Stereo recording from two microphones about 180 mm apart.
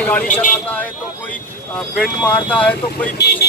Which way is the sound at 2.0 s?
10° left (ahead or behind).